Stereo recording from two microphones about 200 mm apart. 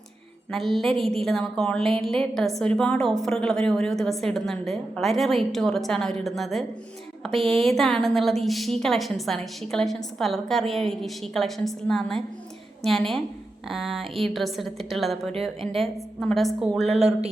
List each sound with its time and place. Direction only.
0.5 s a woman's voice: centre (ahead or behind)
7.3 s speech: 30° right (ahead or behind)
7.6 s a woman's voice: centre (ahead or behind)
16.8 s a woman's voice: 30° right (ahead or behind)